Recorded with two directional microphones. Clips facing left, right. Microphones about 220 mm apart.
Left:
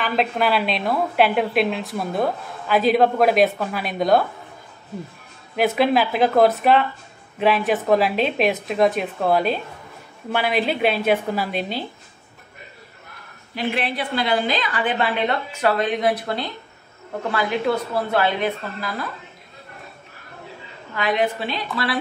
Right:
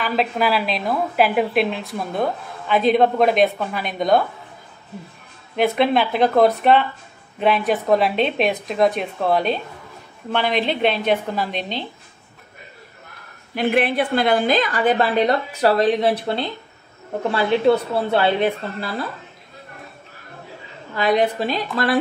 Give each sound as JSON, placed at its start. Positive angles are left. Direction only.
{"t": 0.0, "sound": "speech", "side_deg": 0}
{"t": 5.6, "sound": "a woman's voice", "side_deg": 5}
{"t": 13.6, "sound": "a woman's voice", "side_deg": -55}
{"t": 20.9, "sound": "a woman's voice", "side_deg": -35}